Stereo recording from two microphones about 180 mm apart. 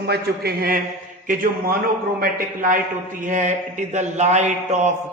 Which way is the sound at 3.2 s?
45° right (ahead or behind).